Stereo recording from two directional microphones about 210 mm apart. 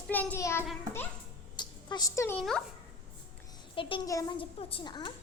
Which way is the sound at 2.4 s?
Centre (ahead or behind).